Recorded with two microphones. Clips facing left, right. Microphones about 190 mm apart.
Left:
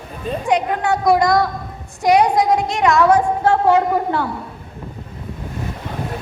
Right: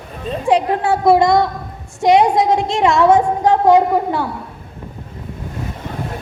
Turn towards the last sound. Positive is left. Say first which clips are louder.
# right 2 dB
turn(degrees=-15)  # may be behind; listen again after turning